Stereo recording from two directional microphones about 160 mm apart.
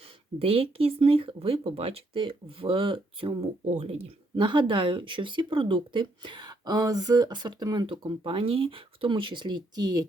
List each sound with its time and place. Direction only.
0.3 s speech: 35° right (ahead or behind)